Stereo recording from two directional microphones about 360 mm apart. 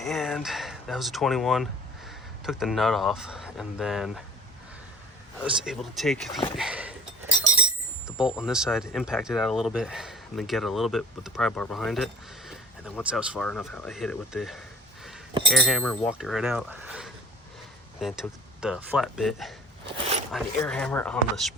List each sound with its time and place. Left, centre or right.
0.0 s speech: centre
5.4 s speech: centre
6.6 s dog: centre
7.0 s chink: right
8.2 s speech: centre